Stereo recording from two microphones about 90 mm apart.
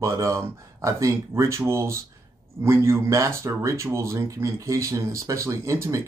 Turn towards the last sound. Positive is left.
turn(degrees=-35)  # may be behind; listen again after turning